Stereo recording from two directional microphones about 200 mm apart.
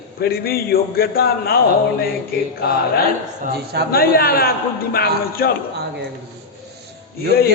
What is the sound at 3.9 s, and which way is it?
A man's voice, 50° left (ahead or behind).